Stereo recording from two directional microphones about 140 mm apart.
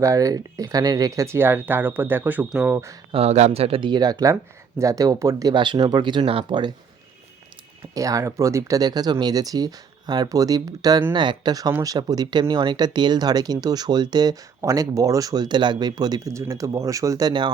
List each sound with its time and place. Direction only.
0.0 s speech: 25° right (ahead or behind)
2.7 s speech: 20° right (ahead or behind)
3.1 s speech: 50° right (ahead or behind)
7.9 s speech: 25° right (ahead or behind)